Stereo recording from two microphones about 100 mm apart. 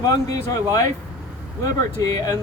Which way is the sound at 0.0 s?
35° left (ahead or behind).